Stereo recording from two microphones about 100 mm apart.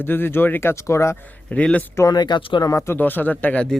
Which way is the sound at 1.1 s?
15° left (ahead or behind).